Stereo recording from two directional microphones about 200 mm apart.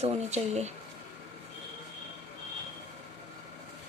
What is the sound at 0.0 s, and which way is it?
Speech, 35° right (ahead or behind).